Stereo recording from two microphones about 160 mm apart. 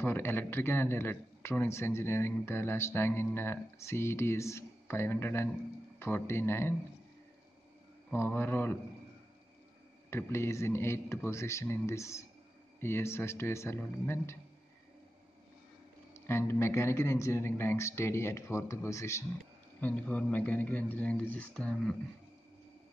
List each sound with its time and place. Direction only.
0.0 s a man's voice: 15° left (ahead or behind)
8.1 s a man's voice: 15° left (ahead or behind)
10.0 s a man's voice: 15° left (ahead or behind)
16.1 s a man's voice: 15° left (ahead or behind)